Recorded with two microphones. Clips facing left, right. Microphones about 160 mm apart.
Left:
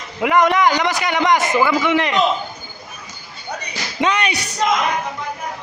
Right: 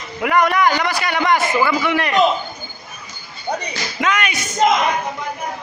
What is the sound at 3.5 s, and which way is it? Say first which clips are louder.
Slam: right 6 dB; 35° right (ahead or behind).